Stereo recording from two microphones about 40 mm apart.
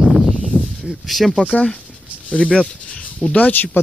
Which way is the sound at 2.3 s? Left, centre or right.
Left.